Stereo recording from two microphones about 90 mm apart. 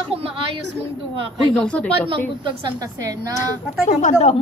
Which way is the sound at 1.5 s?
10° left (ahead or behind).